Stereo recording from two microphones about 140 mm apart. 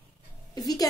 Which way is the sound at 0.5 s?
25° left (ahead or behind).